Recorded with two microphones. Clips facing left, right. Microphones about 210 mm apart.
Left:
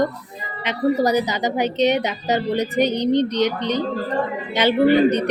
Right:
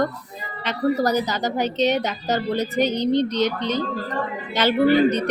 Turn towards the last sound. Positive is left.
turn(degrees=15)  # may be behind; listen again after turning